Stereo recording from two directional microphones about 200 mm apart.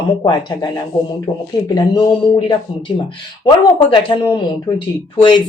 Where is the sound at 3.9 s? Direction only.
25° left (ahead or behind).